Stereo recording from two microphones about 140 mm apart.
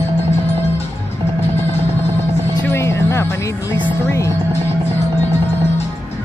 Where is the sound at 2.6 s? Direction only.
20° left (ahead or behind).